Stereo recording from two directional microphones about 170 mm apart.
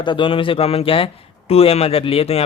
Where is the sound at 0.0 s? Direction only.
30° left (ahead or behind).